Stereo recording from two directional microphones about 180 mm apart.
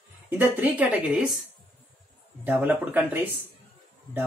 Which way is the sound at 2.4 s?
10° right (ahead or behind).